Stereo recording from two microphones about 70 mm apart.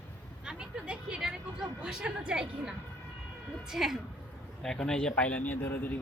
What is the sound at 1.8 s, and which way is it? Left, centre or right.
A woman's voice, centre.